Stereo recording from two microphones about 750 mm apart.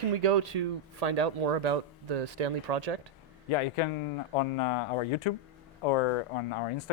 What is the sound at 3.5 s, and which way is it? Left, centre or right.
Speech, left.